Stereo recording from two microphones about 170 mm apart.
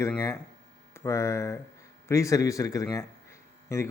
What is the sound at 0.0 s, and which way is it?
A man's voice, 20° left (ahead or behind).